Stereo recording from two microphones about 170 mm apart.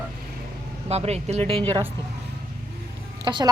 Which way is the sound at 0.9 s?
40° right (ahead or behind).